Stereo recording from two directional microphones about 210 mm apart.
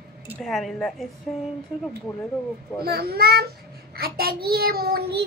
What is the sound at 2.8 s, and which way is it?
Child singing, 50° right (ahead or behind).